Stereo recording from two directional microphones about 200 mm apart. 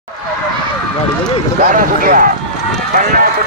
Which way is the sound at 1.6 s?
45° right (ahead or behind).